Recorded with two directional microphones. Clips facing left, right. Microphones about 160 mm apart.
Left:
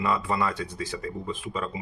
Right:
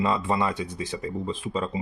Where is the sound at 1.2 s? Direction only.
30° right (ahead or behind).